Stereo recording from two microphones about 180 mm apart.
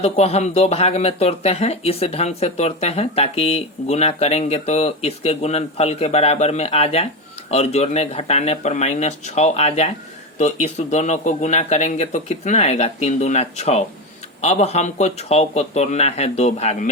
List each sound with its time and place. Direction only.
0.0 s speech: 35° left (ahead or behind)